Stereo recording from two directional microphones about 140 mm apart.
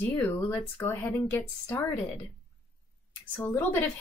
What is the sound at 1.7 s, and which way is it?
Speech, centre (ahead or behind).